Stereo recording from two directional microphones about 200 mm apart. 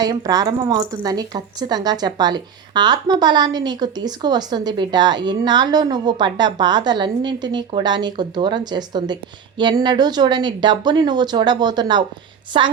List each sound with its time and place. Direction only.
0.0 s a woman's voice: 20° right (ahead or behind)